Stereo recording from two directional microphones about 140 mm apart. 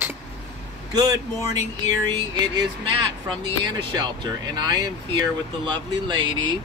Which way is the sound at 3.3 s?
35° right (ahead or behind).